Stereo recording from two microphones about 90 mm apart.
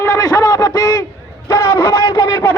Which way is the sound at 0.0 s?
40° left (ahead or behind).